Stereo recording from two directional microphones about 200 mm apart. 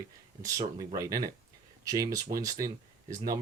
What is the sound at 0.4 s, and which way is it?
Speech, 15° right (ahead or behind).